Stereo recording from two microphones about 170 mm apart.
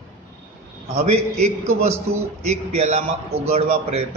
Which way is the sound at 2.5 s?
40° right (ahead or behind).